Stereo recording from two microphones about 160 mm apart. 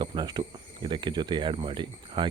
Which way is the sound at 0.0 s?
30° right (ahead or behind).